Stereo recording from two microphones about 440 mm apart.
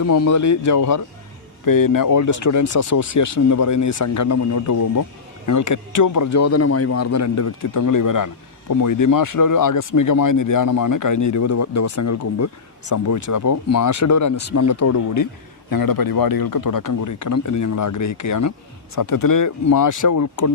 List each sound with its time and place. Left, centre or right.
0.0 s a man's voice: left